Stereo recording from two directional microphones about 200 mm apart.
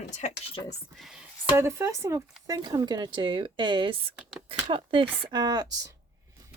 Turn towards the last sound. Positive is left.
turn(degrees=-15)  # may be behind; listen again after turning